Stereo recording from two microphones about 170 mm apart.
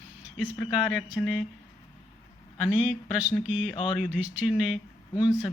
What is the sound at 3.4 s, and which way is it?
Speech, 10° right (ahead or behind).